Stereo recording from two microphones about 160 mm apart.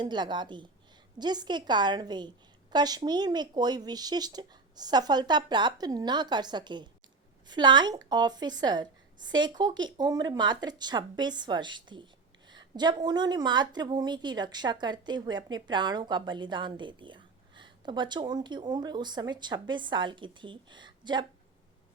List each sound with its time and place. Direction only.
0.0 s a woman's voice: 30° right (ahead or behind)